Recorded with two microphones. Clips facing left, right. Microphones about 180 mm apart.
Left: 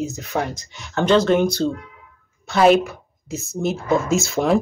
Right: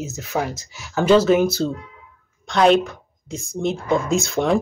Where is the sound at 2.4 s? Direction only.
5° left (ahead or behind).